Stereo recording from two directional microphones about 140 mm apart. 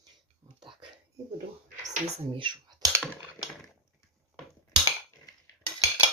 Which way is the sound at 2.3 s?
35° right (ahead or behind).